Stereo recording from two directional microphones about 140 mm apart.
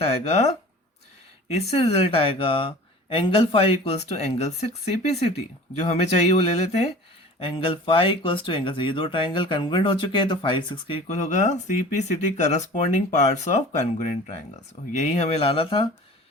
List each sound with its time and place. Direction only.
0.0 s speech: 50° left (ahead or behind)
1.5 s speech: 45° left (ahead or behind)
11.1 s speech: 55° left (ahead or behind); by 15.9 s 40° left (ahead or behind)